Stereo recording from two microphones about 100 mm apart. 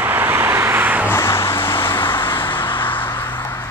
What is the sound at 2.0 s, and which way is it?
Vehicle, 55° left (ahead or behind).